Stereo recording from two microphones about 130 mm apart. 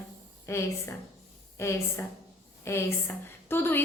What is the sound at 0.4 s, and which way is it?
A woman's voice, 20° left (ahead or behind).